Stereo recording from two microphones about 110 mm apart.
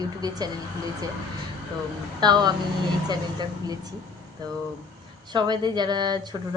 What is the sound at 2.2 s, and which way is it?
Speech, 40° right (ahead or behind).